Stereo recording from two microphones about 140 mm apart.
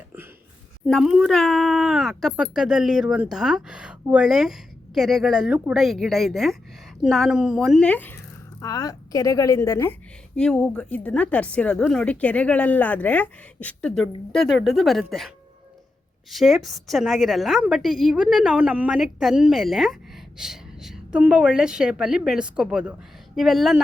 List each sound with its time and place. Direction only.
0.9 s a woman's voice: centre (ahead or behind)
7.9 s speech: 15° left (ahead or behind)
8.6 s a woman's voice: 25° left (ahead or behind)
10.3 s a woman's voice: 5° left (ahead or behind)
16.3 s a woman's voice: centre (ahead or behind)